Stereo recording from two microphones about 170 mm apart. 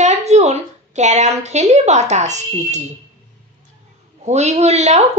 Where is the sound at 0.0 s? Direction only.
40° right (ahead or behind).